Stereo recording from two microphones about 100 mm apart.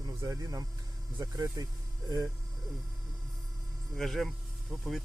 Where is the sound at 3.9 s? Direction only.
Centre (ahead or behind).